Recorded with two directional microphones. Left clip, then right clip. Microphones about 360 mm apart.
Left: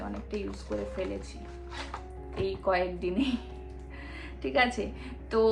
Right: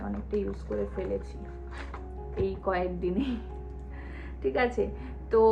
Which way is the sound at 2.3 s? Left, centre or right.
Centre.